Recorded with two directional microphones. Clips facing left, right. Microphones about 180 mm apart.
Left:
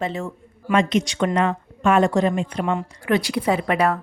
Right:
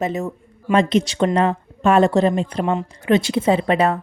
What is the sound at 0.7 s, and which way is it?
A woman's voice, 35° right (ahead or behind).